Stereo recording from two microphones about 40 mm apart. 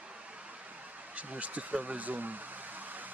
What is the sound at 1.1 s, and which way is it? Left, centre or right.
Speech, right.